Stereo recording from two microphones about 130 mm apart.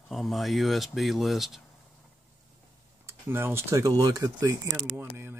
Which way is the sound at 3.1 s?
20° right (ahead or behind).